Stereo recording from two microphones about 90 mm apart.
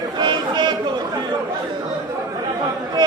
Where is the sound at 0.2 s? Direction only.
60° right (ahead or behind).